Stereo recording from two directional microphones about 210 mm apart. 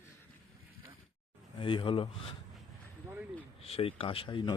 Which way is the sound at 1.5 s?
25° left (ahead or behind).